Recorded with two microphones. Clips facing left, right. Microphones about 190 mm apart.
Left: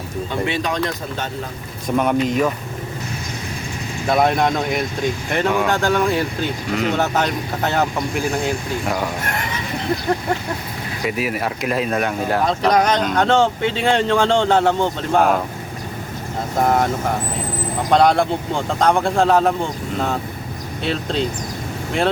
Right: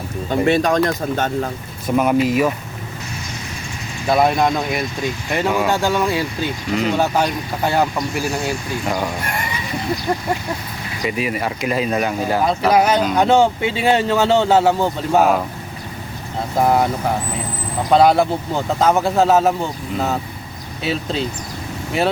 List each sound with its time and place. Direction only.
0.3 s speech: 45° right (ahead or behind)
2.0 s speech: 5° right (ahead or behind)
4.0 s speech: centre (ahead or behind)
6.7 s speech: centre (ahead or behind)
6.9 s speech: 10° right (ahead or behind)
11.0 s speech: centre (ahead or behind)
16.6 s speech: 5° right (ahead or behind)
17.9 s speech: 5° right (ahead or behind)
20.8 s speech: 5° right (ahead or behind)